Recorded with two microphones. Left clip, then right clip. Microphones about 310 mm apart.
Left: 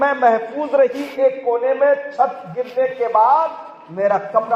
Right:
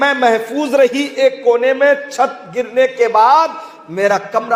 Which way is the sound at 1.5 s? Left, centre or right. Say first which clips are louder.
Right 4 dB; right.